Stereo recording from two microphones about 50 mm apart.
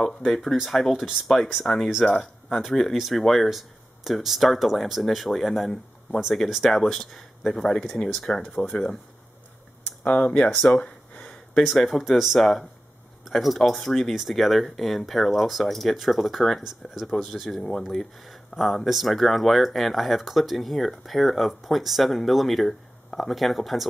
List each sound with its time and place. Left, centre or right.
0.0 s speech: centre
8.6 s speech: left
10.0 s speech: left
10.5 s gasp: left
11.7 s speech: centre